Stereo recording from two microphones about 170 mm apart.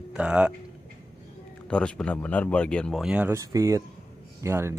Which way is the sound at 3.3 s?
20° right (ahead or behind).